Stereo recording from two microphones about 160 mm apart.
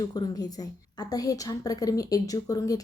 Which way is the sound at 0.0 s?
25° left (ahead or behind).